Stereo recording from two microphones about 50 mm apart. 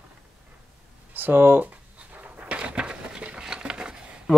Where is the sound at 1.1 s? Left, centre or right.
Right.